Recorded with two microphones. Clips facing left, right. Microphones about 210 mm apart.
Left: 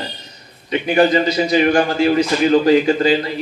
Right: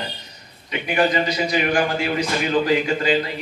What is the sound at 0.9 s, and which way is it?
A man's voice, 35° left (ahead or behind).